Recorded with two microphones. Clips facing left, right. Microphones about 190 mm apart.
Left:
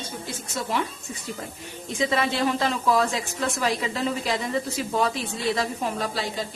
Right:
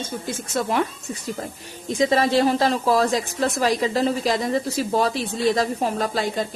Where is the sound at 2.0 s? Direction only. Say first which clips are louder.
Right 6 dB; 35° right (ahead or behind).